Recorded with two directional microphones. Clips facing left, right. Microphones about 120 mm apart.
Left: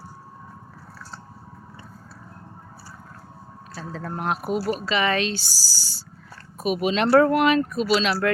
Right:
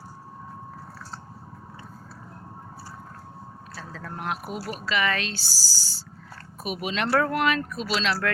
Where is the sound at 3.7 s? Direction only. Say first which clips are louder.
Left 6 dB; 30° left (ahead or behind).